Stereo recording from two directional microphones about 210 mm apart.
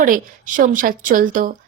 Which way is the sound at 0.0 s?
40° right (ahead or behind).